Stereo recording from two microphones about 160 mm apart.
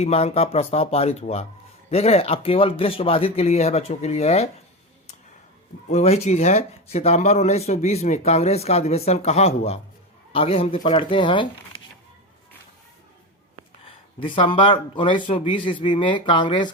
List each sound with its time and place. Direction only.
0.0 s speech: 40° left (ahead or behind)
5.9 s speech: 40° left (ahead or behind)
13.8 s speech: 35° left (ahead or behind)